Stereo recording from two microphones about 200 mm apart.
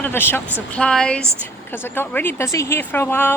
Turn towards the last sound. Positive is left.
turn(degrees=10)  # may be behind; listen again after turning